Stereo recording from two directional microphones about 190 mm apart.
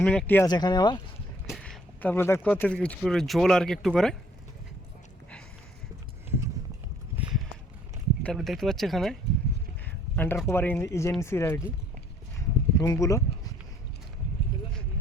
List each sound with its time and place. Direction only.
0.0 s speech: 5° left (ahead or behind)
0.4 s speech: 20° left (ahead or behind)
1.5 s speech: centre (ahead or behind)
7.2 s a sound: 5° right (ahead or behind)
8.2 s speech: centre (ahead or behind)
12.4 s a sound: 15° left (ahead or behind)